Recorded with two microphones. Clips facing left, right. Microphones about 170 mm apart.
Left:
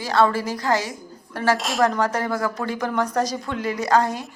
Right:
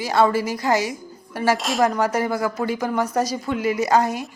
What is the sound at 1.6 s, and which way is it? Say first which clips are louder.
Speech: right 1 dB; centre (ahead or behind).